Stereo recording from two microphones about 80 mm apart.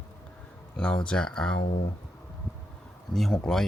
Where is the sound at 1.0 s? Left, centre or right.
Centre.